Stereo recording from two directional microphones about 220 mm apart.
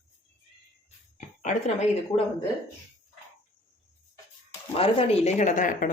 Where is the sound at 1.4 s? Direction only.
35° left (ahead or behind).